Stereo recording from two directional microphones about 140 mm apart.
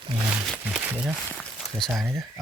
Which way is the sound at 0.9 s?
10° right (ahead or behind).